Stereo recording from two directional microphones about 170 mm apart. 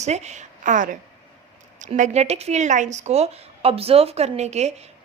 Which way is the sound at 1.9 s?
40° right (ahead or behind).